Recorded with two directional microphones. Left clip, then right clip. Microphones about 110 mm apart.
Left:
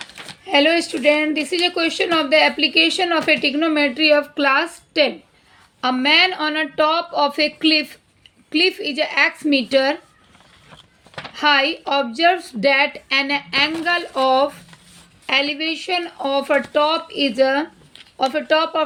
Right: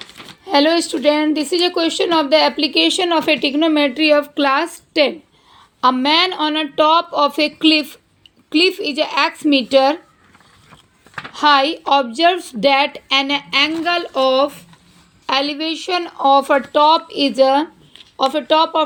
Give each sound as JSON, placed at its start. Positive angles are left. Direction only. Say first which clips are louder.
{"t": 0.4, "sound": "a woman's voice", "louder": "right 1 dB", "side_deg": -30}
{"t": 11.3, "sound": "a woman's voice", "louder": "right 3 dB", "side_deg": -35}